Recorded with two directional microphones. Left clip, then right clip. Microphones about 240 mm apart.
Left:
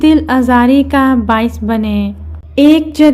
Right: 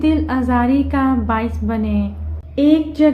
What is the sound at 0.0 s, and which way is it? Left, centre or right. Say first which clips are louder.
Speech: left 8 dB; left.